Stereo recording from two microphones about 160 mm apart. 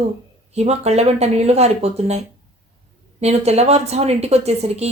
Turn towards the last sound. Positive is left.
turn(degrees=-40)  # may be behind; listen again after turning